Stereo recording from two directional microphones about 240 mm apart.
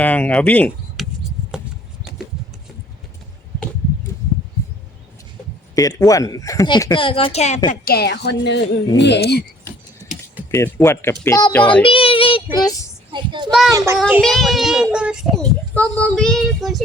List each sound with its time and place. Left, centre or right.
0.0 s speech: centre
5.7 s speech: centre
7.7 s a woman's voice: left
10.5 s speech: centre
11.8 s speech: left
13.1 s a child's voice: centre
14.1 s a child's voice: centre